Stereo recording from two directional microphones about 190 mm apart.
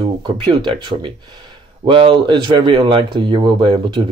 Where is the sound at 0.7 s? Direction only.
25° right (ahead or behind).